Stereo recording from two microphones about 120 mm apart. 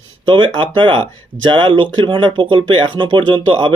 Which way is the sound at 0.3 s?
40° right (ahead or behind).